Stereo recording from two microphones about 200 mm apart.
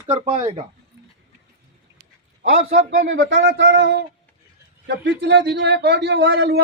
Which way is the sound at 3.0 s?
65° right (ahead or behind).